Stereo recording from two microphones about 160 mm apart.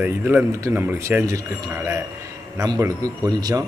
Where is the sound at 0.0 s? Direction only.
10° right (ahead or behind).